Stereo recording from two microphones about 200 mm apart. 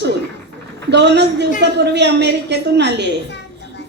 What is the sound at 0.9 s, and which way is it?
A woman's voice, 60° right (ahead or behind).